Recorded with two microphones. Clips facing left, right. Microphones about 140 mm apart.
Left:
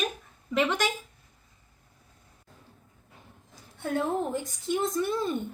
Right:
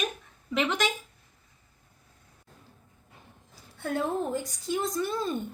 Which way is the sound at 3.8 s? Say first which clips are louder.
Left 1 dB; 20° left (ahead or behind).